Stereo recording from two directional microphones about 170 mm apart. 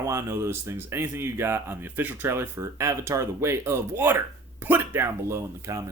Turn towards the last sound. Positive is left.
turn(degrees=-15)  # may be behind; listen again after turning